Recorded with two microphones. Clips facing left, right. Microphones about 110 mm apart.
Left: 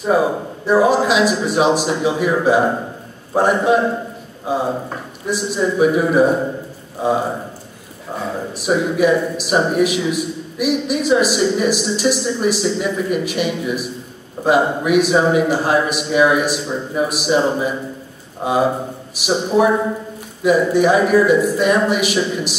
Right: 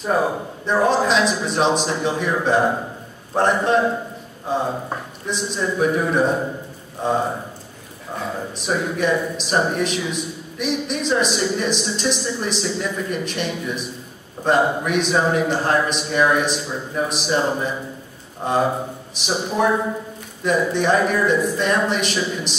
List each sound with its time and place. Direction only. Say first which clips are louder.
0.0 s a man's voice: left 4 dB; 5° left (ahead or behind)